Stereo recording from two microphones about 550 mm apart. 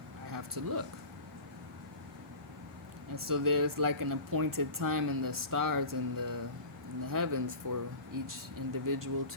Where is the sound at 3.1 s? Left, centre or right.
Right.